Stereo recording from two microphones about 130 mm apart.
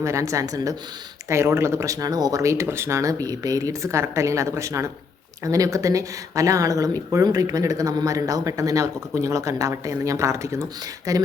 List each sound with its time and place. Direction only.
0.0 s speech: 25° right (ahead or behind)